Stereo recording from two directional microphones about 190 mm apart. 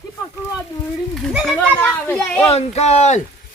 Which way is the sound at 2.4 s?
35° left (ahead or behind).